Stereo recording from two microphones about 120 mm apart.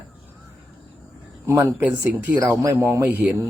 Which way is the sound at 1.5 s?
15° right (ahead or behind).